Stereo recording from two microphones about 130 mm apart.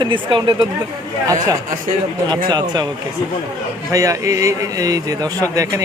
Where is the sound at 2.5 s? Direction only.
30° right (ahead or behind).